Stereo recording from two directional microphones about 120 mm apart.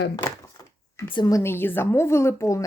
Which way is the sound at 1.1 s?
35° left (ahead or behind).